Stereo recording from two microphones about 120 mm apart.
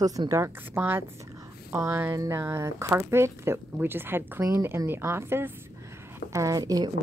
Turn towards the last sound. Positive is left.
turn(degrees=-30)  # may be behind; listen again after turning